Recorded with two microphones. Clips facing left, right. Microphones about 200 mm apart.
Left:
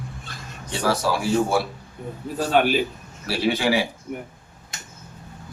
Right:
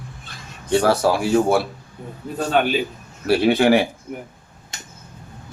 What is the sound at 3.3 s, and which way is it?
Speech, 55° right (ahead or behind).